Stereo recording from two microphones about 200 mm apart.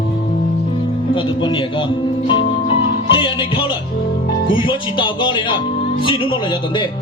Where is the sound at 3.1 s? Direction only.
25° left (ahead or behind).